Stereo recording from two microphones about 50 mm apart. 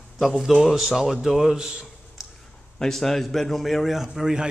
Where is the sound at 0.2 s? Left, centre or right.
Centre.